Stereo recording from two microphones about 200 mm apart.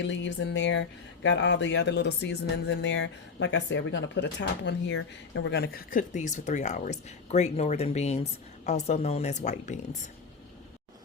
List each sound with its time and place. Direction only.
0.0 s speech: 65° left (ahead or behind); by 9.8 s 35° left (ahead or behind)